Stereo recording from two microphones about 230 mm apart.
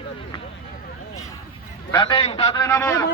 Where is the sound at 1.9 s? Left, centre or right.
Left.